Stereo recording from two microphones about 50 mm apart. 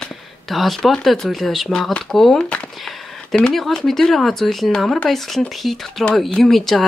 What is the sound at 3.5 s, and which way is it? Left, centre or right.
Speech, centre.